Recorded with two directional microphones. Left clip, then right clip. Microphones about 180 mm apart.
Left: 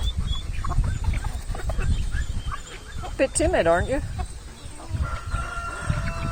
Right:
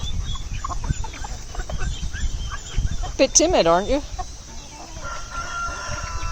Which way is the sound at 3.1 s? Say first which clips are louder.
Right 5 dB; 25° right (ahead or behind).